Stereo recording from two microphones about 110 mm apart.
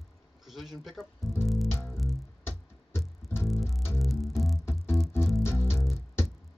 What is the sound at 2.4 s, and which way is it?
Music, 20° left (ahead or behind).